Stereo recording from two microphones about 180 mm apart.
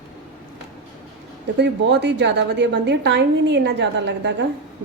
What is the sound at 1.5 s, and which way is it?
A woman's voice, 75° right (ahead or behind).